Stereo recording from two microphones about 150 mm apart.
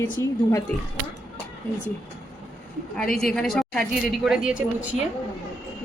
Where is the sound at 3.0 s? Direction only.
5° left (ahead or behind).